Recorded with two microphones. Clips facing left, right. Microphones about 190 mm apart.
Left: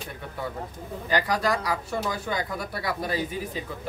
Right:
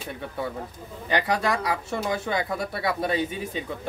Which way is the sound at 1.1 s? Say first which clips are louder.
Right 1 dB; 25° right (ahead or behind).